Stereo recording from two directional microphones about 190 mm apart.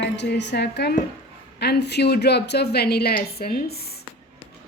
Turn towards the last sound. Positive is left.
turn(degrees=55)  # may be behind; listen again after turning